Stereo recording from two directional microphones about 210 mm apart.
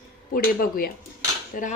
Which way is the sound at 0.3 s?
45° left (ahead or behind).